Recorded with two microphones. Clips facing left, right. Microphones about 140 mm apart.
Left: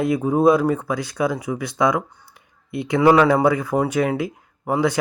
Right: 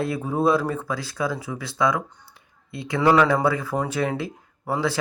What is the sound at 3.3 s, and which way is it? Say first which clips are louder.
Speech: left 4 dB; 15° left (ahead or behind).